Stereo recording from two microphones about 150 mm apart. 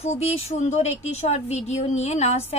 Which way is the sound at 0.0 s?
45° left (ahead or behind).